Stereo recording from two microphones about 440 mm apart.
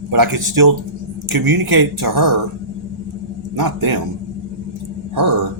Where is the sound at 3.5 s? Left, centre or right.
Right.